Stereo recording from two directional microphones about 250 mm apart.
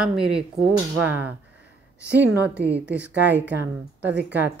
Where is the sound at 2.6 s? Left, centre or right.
Right.